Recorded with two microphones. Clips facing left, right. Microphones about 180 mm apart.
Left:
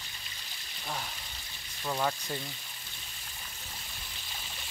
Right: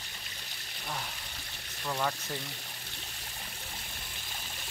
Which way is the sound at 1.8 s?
15° left (ahead or behind).